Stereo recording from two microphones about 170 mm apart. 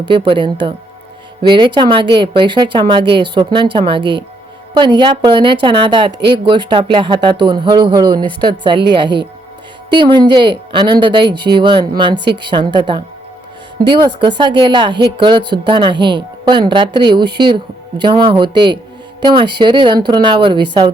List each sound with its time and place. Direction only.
0.1 s speech: 30° right (ahead or behind)